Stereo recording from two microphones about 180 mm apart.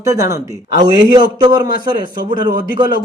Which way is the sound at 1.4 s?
20° right (ahead or behind).